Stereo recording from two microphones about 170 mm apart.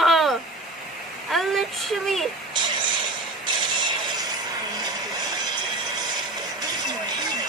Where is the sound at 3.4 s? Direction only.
25° right (ahead or behind).